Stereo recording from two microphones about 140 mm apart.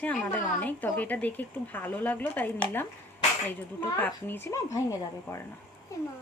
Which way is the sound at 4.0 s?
15° left (ahead or behind).